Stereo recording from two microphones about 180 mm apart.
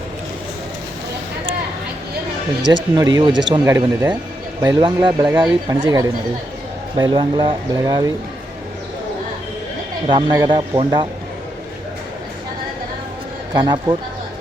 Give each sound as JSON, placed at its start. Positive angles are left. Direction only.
{"t": 2.9, "sound": "speech", "side_deg": -25}
{"t": 10.1, "sound": "speech", "side_deg": -25}
{"t": 13.5, "sound": "speech", "side_deg": -25}